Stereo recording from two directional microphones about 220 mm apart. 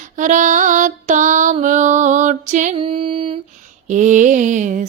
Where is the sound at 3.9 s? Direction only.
35° right (ahead or behind).